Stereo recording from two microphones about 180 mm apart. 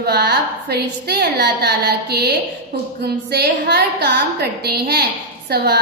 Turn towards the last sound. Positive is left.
turn(degrees=-60)  # may be behind; listen again after turning